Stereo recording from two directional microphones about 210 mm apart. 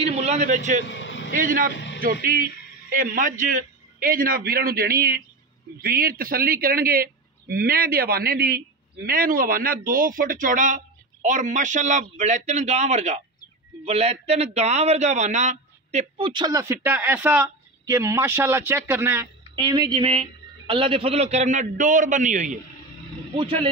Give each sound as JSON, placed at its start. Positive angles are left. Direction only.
{"t": 0.0, "sound": "a man's voice", "side_deg": -30}
{"t": 0.8, "sound": "a sound", "side_deg": 60}
{"t": 1.3, "sound": "a man's voice", "side_deg": -40}
{"t": 2.9, "sound": "a man's voice", "side_deg": -40}
{"t": 23.3, "sound": "a man's voice", "side_deg": -25}